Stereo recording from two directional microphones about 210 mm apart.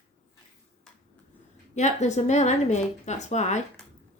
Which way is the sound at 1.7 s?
35° left (ahead or behind).